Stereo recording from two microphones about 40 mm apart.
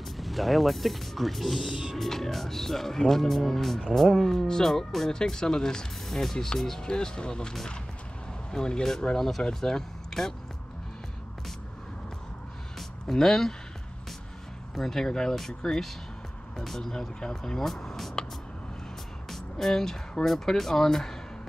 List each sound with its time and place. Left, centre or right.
0.2 s speech: centre
4.3 s speech: centre
12.7 s music: centre
14.8 s speech: centre
19.2 s speech: centre